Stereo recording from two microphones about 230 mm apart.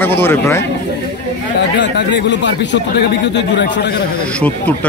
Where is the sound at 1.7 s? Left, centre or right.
Left.